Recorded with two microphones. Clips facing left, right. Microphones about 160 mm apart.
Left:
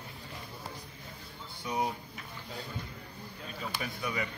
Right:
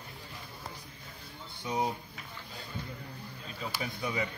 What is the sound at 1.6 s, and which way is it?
Speech, 20° right (ahead or behind).